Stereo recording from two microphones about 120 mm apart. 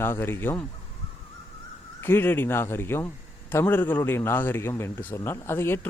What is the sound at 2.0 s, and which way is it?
Speech, 20° left (ahead or behind).